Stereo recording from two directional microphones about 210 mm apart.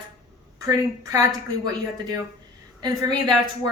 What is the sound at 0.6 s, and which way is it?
A woman's voice, 15° right (ahead or behind).